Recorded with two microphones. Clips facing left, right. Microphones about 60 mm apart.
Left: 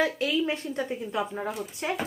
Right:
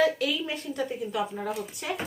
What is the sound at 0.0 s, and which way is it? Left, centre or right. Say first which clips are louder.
Speech: even; left.